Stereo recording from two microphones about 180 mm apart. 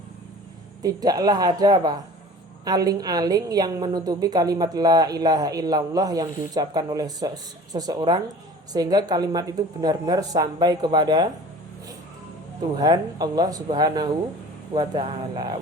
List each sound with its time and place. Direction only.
0.8 s a woman's voice: 20° right (ahead or behind)
12.8 s a woman's voice: 20° right (ahead or behind)